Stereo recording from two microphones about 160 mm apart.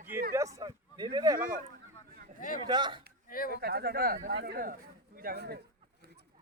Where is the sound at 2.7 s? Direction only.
30° right (ahead or behind).